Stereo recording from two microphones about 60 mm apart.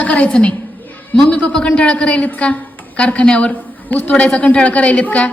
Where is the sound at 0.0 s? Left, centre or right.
Left.